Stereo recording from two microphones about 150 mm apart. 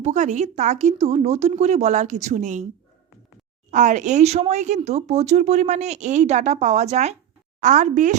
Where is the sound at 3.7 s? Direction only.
55° right (ahead or behind).